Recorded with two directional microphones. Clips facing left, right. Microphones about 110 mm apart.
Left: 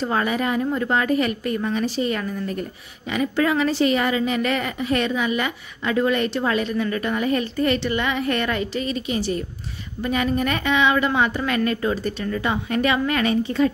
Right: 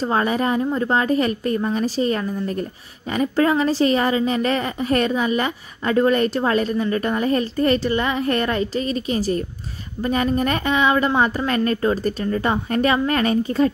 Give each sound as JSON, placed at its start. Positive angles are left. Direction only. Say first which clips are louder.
{"t": 0.0, "sound": "a woman's voice", "louder": "right 2 dB", "side_deg": -35}